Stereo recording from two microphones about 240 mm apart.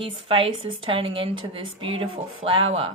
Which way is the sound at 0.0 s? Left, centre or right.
Right.